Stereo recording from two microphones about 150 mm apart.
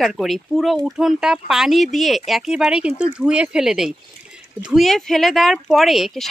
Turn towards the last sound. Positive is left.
turn(degrees=0)  # may be behind; listen again after turning